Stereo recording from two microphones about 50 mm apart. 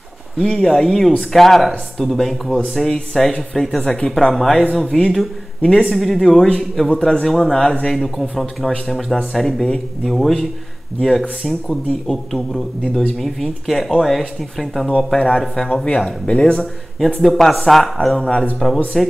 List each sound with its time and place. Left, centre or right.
0.4 s speech: centre
15.0 s speech: centre
17.2 s speech: centre